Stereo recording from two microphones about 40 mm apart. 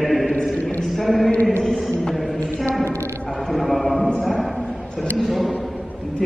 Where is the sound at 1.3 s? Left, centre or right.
Left.